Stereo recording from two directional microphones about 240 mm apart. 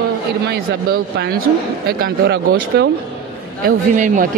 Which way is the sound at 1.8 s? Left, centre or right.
Right.